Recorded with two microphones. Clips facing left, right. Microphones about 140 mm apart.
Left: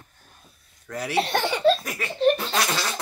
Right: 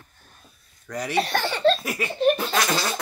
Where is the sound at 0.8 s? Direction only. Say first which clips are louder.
Right 1 dB; 5° left (ahead or behind).